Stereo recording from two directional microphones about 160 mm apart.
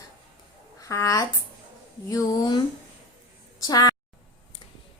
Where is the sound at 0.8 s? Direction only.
20° left (ahead or behind).